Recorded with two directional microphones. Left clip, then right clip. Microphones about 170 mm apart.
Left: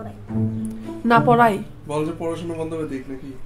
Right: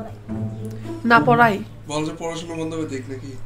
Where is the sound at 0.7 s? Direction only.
10° left (ahead or behind).